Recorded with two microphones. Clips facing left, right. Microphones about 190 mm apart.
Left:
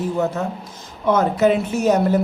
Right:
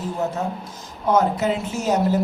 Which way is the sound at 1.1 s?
65° left (ahead or behind).